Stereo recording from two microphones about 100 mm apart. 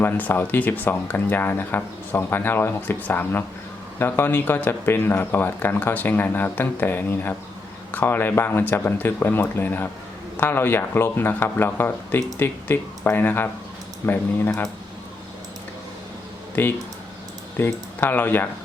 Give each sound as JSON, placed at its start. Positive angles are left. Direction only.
{"t": 0.0, "sound": "speech", "side_deg": 20}
{"t": 16.6, "sound": "speech", "side_deg": 20}